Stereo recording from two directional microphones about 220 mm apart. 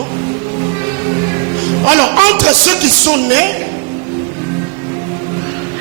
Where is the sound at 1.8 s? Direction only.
10° right (ahead or behind).